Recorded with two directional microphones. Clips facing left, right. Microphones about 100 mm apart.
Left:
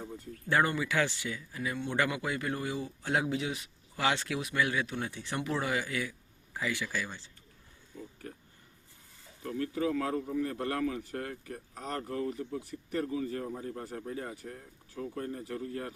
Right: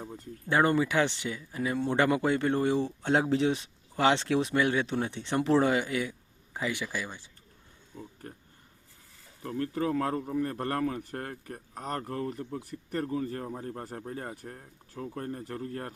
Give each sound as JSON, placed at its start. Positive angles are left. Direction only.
{"t": 0.0, "sound": "a sound", "side_deg": -20}
{"t": 0.6, "sound": "speech", "side_deg": -30}
{"t": 0.9, "sound": "speech", "side_deg": -20}
{"t": 9.4, "sound": "speech", "side_deg": -35}
{"t": 9.7, "sound": "a man's voice", "side_deg": -45}